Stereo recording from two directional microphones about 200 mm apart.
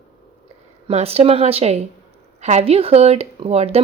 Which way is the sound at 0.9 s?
30° right (ahead or behind).